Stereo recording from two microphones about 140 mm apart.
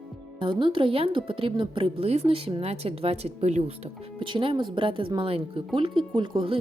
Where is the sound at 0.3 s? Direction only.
35° right (ahead or behind).